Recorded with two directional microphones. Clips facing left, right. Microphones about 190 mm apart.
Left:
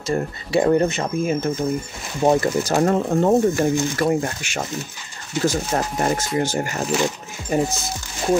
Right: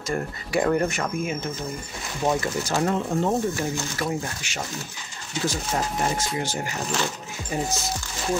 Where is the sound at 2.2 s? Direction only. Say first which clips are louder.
Left 7 dB; 40° left (ahead or behind).